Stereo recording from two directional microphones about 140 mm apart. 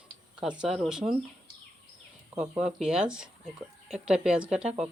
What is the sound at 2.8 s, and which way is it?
Speech, 5° right (ahead or behind).